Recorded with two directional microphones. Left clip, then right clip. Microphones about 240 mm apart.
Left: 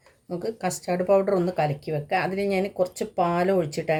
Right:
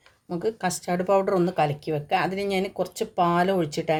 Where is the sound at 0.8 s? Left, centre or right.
Right.